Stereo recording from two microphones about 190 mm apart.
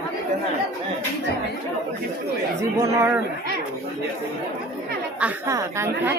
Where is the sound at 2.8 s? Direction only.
15° right (ahead or behind).